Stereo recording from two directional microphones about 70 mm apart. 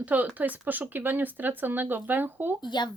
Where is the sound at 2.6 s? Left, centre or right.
Left.